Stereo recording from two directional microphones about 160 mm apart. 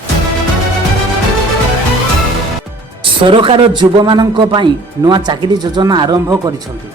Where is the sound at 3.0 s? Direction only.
30° right (ahead or behind).